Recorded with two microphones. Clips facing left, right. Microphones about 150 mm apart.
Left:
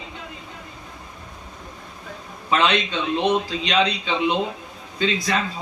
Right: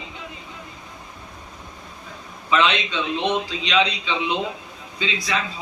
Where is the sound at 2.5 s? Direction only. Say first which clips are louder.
Even; 45° left (ahead or behind).